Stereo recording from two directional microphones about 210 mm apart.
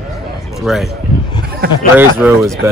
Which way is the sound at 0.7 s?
Centre (ahead or behind).